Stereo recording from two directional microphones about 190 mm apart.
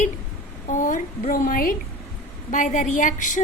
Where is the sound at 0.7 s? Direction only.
45° left (ahead or behind).